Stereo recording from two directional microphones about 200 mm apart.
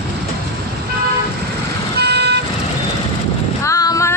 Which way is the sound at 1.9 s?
55° right (ahead or behind).